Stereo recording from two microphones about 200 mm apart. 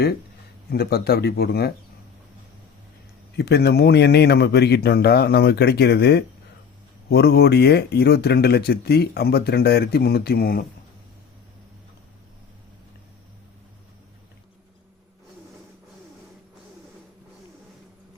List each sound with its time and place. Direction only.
0.7 s speech: 50° left (ahead or behind)
3.3 s speech: 55° left (ahead or behind)